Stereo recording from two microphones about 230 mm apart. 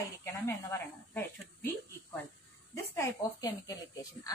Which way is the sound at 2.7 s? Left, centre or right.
Centre.